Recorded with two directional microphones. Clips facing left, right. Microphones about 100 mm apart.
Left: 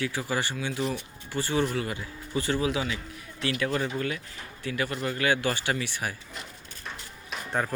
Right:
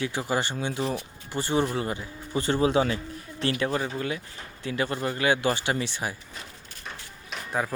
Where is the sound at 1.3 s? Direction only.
20° right (ahead or behind); by 3.7 s 35° right (ahead or behind).